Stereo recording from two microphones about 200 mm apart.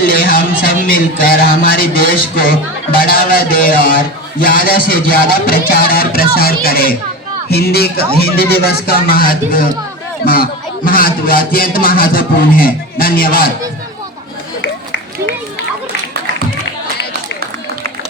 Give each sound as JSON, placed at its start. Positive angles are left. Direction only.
{"t": 0.0, "sound": "speech", "side_deg": 45}